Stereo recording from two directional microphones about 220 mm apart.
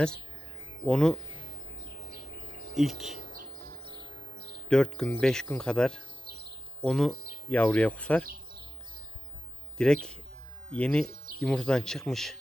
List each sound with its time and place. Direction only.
0.9 s speech: 5° left (ahead or behind)
2.7 s speech: centre (ahead or behind)
4.7 s speech: 5° left (ahead or behind)
6.2 s a sound: 45° right (ahead or behind)
6.8 s speech: 5° left (ahead or behind)
9.7 s speech: 5° left (ahead or behind)